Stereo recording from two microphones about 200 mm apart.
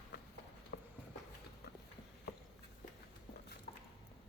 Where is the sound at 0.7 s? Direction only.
55° left (ahead or behind).